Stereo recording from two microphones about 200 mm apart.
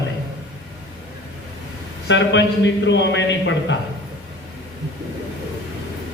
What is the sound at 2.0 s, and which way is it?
A man's voice, 65° left (ahead or behind).